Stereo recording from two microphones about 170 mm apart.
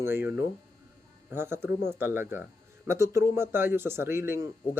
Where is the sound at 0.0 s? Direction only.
15° right (ahead or behind).